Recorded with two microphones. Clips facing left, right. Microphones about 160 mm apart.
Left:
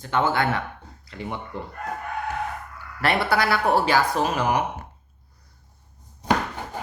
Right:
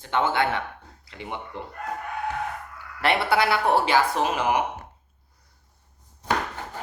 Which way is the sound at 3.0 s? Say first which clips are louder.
Even; 25° right (ahead or behind).